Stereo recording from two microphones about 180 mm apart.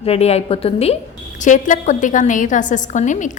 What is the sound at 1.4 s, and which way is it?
A woman's voice, 45° left (ahead or behind).